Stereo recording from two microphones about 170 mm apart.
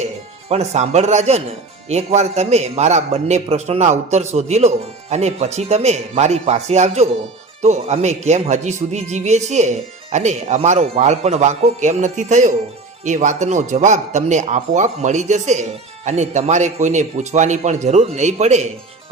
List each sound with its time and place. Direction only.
0.0 s a man's voice: 40° right (ahead or behind)